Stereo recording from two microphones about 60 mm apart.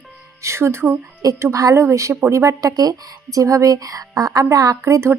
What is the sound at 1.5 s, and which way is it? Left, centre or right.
Speech, right.